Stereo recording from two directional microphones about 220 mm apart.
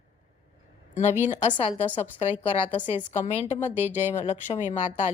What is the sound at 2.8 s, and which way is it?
Speech, 20° left (ahead or behind).